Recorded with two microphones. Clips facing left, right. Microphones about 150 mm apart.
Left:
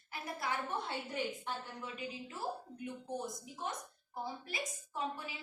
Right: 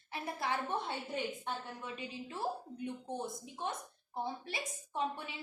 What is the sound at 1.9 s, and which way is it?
A woman's voice, 25° right (ahead or behind).